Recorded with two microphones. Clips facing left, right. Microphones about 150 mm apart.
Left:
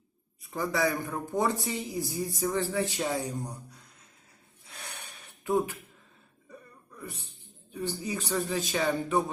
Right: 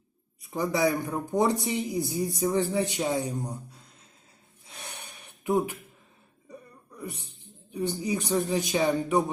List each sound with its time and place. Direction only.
0.5 s speech: 20° right (ahead or behind)
4.6 s gasp: 20° right (ahead or behind)
6.5 s music: 15° right (ahead or behind)
7.7 s speech: 15° right (ahead or behind)